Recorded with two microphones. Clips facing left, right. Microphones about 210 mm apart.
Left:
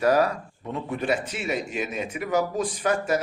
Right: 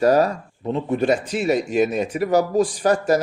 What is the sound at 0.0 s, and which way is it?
Speech, 30° right (ahead or behind).